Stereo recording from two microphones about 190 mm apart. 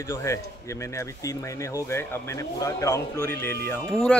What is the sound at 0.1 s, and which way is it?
Speech, 15° left (ahead or behind).